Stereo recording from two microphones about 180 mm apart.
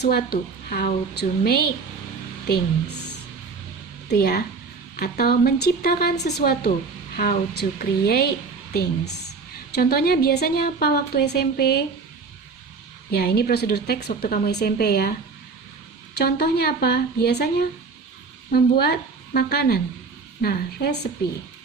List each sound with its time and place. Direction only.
0.0 s a woman's voice: 60° left (ahead or behind)
4.1 s a woman's voice: 60° left (ahead or behind)
9.7 s a woman's voice: 60° left (ahead or behind)
13.1 s a woman's voice: 65° left (ahead or behind)
16.1 s a woman's voice: 60° left (ahead or behind)